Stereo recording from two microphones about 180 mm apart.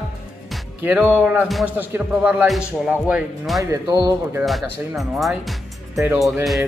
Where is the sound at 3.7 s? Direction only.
20° right (ahead or behind).